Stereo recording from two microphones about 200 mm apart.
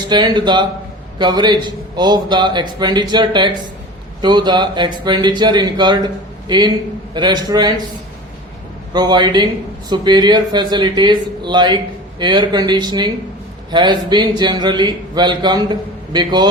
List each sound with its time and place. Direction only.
0.1 s speech: 20° right (ahead or behind)
7.1 s speech: 20° right (ahead or behind)
8.9 s speech: 20° right (ahead or behind)